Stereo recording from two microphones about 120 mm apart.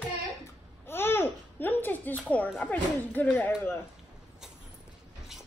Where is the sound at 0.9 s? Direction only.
20° left (ahead or behind).